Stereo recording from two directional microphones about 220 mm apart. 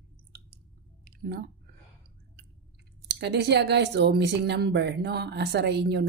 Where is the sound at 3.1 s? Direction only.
50° right (ahead or behind).